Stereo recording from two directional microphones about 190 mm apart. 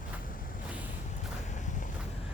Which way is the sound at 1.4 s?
40° left (ahead or behind).